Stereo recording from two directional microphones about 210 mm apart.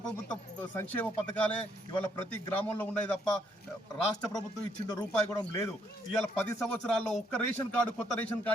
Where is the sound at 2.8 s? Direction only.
5° left (ahead or behind).